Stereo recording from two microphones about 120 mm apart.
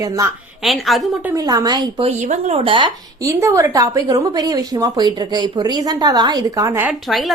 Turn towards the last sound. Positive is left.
turn(degrees=0)  # may be behind; listen again after turning